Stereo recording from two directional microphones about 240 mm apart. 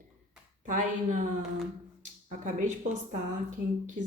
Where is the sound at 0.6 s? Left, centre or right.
Right.